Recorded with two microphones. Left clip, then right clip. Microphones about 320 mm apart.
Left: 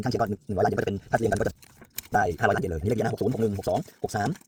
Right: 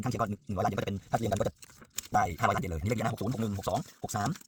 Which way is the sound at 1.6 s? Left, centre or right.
Centre.